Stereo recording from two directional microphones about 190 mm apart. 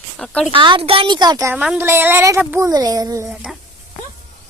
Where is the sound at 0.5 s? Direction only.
25° right (ahead or behind).